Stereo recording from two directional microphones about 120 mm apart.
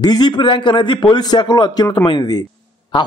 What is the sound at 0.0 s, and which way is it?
A man's voice, 35° left (ahead or behind).